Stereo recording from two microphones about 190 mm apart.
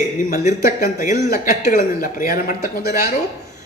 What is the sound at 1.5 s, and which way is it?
Speech, 50° left (ahead or behind).